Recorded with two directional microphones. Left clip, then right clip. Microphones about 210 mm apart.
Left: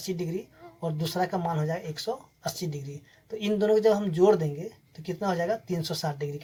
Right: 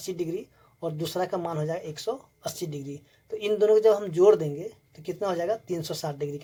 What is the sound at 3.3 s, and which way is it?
Speech, 35° right (ahead or behind).